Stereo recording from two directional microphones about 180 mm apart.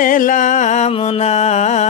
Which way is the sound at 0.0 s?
50° left (ahead or behind).